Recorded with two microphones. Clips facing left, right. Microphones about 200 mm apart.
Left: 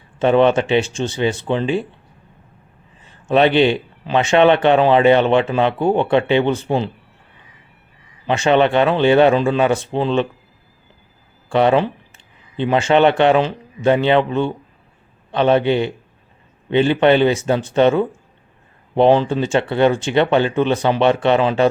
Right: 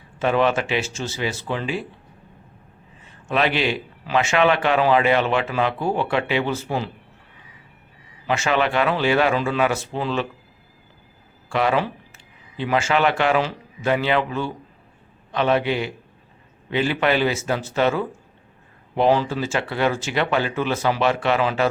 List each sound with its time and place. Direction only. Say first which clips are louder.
0.2 s a man's voice: left 6 dB; 30° left (ahead or behind)
3.0 s a man's voice: left 8 dB; 30° left (ahead or behind)
8.3 s a man's voice: left 7 dB; 30° left (ahead or behind)
11.4 s a man's voice: left 6 dB; 30° left (ahead or behind)